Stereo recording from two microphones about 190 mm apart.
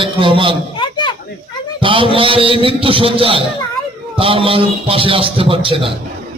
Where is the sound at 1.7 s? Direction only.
25° right (ahead or behind).